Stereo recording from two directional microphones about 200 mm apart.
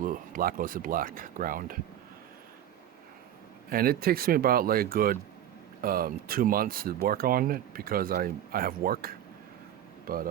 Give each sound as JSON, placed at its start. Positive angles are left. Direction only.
{"t": 0.0, "sound": "speech", "side_deg": -45}
{"t": 3.7, "sound": "speech", "side_deg": -45}